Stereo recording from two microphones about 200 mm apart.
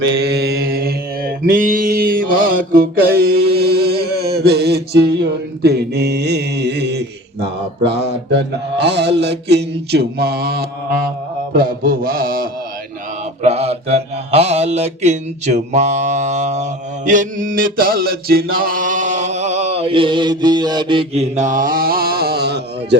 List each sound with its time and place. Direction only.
0.0 s mantra: 60° right (ahead or behind)
13.4 s mantra: 30° right (ahead or behind); by 23.0 s 55° right (ahead or behind)